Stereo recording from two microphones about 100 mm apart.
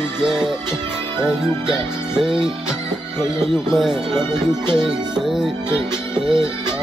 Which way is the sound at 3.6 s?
5° right (ahead or behind).